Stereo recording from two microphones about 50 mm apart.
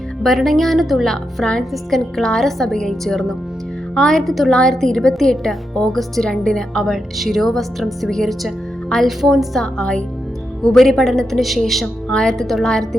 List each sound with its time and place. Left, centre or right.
0.2 s a woman's voice: centre
9.7 s a woman's voice: centre
10.6 s speech: centre
12.0 s a woman's voice: centre